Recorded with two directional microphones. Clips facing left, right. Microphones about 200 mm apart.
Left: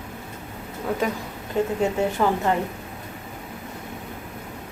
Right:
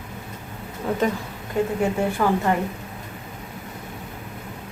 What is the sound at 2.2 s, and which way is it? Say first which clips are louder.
Speech: right 1 dB; 10° left (ahead or behind).